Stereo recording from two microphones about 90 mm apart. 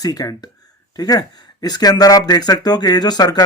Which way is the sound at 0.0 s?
45° left (ahead or behind).